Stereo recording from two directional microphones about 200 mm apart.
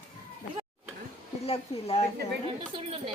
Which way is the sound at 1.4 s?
30° left (ahead or behind).